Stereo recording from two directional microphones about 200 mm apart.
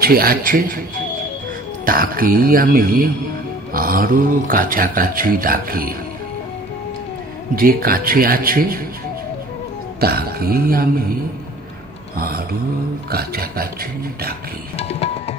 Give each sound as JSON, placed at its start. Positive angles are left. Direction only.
{"t": 0.0, "sound": "speech", "side_deg": -50}
{"t": 1.9, "sound": "speech", "side_deg": -45}
{"t": 7.5, "sound": "speech", "side_deg": -45}
{"t": 9.9, "sound": "speech", "side_deg": -50}
{"t": 12.2, "sound": "speech", "side_deg": -50}
{"t": 14.8, "sound": "music", "side_deg": 30}